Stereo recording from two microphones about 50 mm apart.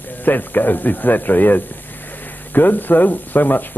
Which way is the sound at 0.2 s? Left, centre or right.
Left.